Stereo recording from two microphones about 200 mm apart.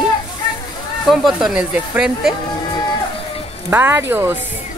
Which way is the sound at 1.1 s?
Centre (ahead or behind).